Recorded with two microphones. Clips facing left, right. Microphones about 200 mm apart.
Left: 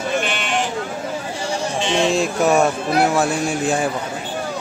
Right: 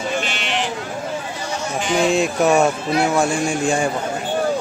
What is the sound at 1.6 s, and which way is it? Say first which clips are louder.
Sheep: right 1 dB; 25° left (ahead or behind).